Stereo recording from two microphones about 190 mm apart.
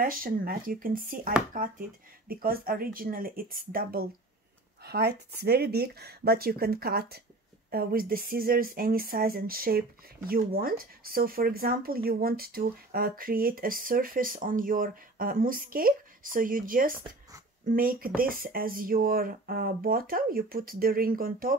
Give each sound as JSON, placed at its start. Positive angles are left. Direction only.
{"t": 0.0, "sound": "speech", "side_deg": -50}
{"t": 18.0, "sound": "speech", "side_deg": -50}